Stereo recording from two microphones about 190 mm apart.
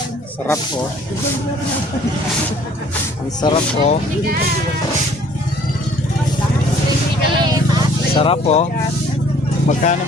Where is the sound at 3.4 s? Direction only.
25° left (ahead or behind).